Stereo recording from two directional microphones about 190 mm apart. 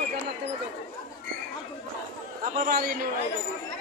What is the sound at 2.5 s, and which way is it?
Speech, 50° right (ahead or behind).